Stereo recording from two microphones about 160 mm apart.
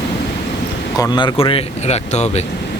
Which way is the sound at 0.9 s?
25° left (ahead or behind).